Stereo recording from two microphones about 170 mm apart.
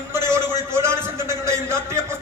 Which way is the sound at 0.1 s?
15° right (ahead or behind).